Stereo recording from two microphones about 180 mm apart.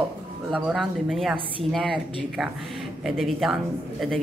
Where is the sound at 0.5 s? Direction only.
Centre (ahead or behind).